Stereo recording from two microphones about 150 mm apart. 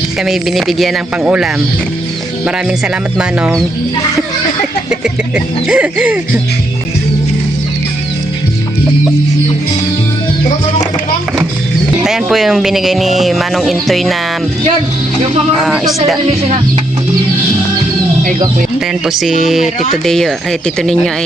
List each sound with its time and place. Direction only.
0.2 s speech: centre (ahead or behind)
2.6 s speech: 5° right (ahead or behind)
4.9 s music: 5° right (ahead or behind)
12.0 s speech: 5° right (ahead or behind)
15.5 s speech: centre (ahead or behind)
19.0 s speech: centre (ahead or behind)